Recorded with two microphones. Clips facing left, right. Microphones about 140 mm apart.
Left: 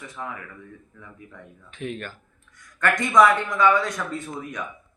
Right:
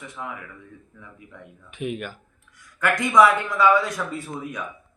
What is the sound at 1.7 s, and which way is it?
A man's voice, 10° right (ahead or behind).